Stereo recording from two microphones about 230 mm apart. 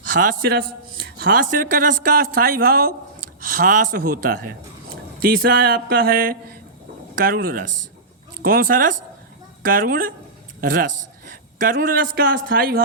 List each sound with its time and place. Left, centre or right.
0.2 s a man's voice: right
11.3 s a sound: right
12.1 s a man's voice: right